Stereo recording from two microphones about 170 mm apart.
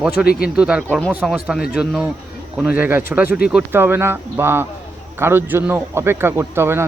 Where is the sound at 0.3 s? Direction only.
60° left (ahead or behind).